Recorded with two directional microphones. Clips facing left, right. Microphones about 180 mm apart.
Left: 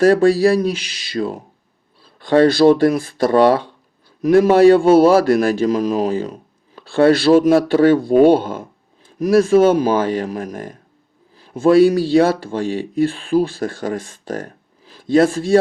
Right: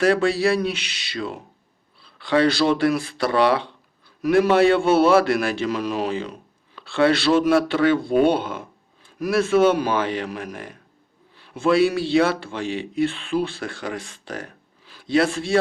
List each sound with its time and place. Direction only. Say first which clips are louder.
0.0 s speech: left 7 dB; 45° left (ahead or behind)
2.0 s a man's voice: left 6 dB; 45° left (ahead or behind)